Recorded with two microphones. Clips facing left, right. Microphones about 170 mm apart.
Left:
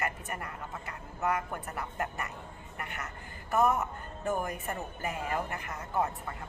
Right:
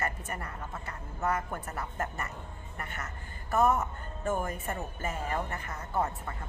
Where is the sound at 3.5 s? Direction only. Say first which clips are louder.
Right 1 dB; 15° left (ahead or behind).